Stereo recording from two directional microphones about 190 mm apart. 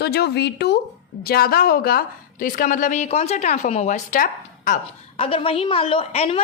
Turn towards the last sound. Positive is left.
turn(degrees=30)  # may be behind; listen again after turning